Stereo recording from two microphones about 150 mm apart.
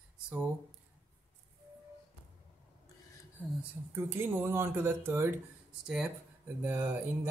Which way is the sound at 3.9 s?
15° right (ahead or behind).